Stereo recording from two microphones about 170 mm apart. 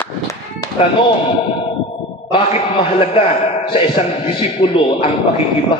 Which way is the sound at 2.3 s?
35° left (ahead or behind).